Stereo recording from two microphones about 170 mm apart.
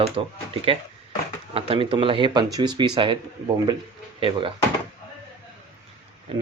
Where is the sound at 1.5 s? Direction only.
30° right (ahead or behind).